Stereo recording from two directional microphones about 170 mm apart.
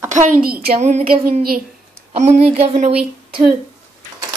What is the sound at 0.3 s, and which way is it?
Speech, 60° right (ahead or behind).